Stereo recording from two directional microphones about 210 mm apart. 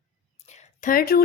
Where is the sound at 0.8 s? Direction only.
45° left (ahead or behind).